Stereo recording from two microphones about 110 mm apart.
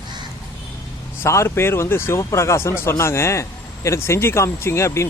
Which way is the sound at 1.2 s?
25° left (ahead or behind).